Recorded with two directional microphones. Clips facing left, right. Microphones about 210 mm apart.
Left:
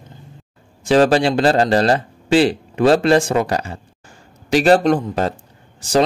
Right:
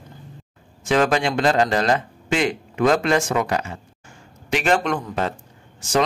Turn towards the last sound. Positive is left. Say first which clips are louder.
# left 4 dB
turn(degrees=35)  # may be behind; listen again after turning